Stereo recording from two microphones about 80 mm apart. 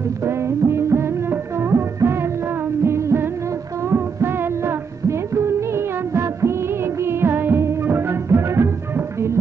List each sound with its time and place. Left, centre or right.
0.2 s music: right
7.0 s music of bollywood: right